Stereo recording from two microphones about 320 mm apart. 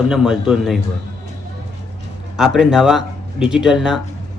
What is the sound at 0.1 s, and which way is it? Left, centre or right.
Speech, centre.